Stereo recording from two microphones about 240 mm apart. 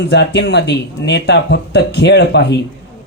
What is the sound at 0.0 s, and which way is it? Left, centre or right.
Speech, left.